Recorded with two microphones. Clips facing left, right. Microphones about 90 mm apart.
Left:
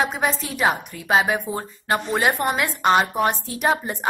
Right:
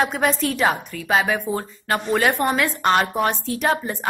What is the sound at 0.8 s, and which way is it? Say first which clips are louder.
A woman's voice: even; 25° left (ahead or behind).